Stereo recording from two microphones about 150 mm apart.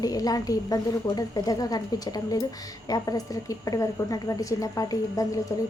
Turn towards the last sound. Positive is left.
turn(degrees=25)  # may be behind; listen again after turning